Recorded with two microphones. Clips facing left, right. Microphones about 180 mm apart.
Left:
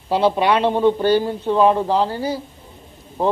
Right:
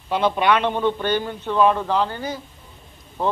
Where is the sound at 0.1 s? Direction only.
30° left (ahead or behind).